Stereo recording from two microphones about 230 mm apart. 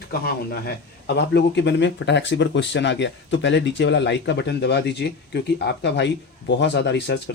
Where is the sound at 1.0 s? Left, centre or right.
Left.